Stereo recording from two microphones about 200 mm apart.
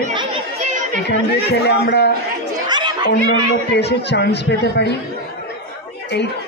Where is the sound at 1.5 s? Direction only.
55° left (ahead or behind).